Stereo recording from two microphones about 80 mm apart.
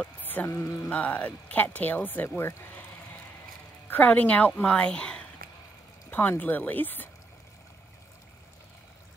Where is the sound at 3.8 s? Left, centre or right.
Left.